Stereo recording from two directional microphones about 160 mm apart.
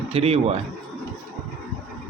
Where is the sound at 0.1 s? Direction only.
40° right (ahead or behind).